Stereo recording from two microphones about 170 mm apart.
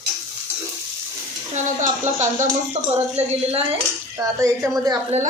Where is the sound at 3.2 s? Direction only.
35° right (ahead or behind).